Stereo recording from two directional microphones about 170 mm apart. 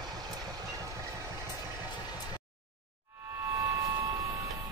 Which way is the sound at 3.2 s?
15° right (ahead or behind).